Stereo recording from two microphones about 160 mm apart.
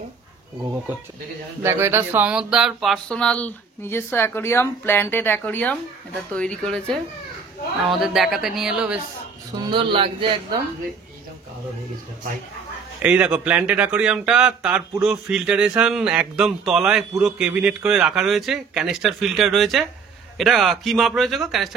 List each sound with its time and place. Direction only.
1.6 s a sound: 15° right (ahead or behind); by 6.6 s 5° left (ahead or behind)
7.8 s speech: centre (ahead or behind)
9.6 s speech: 30° right (ahead or behind)
13.0 s speech: 10° right (ahead or behind)